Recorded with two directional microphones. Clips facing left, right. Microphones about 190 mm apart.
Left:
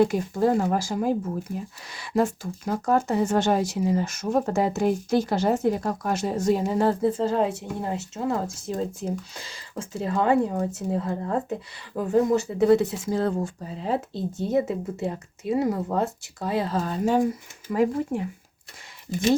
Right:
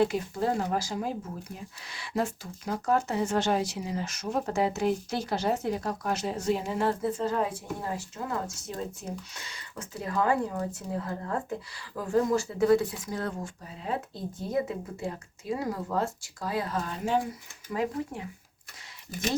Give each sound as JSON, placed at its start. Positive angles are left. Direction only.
{"t": 0.0, "sound": "speech", "side_deg": 45}
{"t": 17.7, "sound": "speech", "side_deg": 50}